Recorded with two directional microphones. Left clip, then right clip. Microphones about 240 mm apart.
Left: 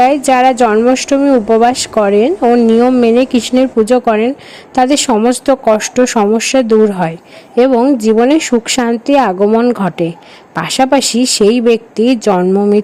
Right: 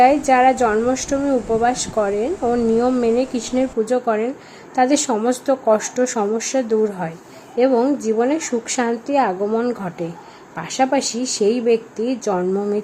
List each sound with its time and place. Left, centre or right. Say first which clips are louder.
0.3 s speech: left 6 dB; left